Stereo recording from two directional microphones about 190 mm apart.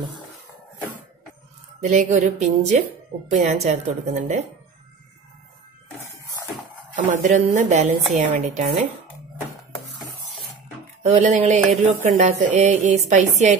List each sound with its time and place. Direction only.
1.8 s a woman's voice: 40° right (ahead or behind)
7.1 s a woman's voice: 40° right (ahead or behind)
11.0 s a woman's voice: 40° right (ahead or behind)